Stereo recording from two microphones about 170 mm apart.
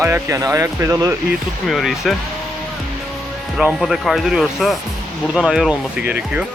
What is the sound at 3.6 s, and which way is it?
Speech, centre (ahead or behind).